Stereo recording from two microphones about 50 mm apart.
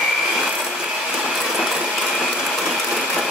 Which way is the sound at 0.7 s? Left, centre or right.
Centre.